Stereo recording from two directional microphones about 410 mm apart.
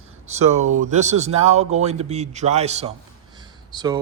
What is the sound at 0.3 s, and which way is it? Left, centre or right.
Speech, centre.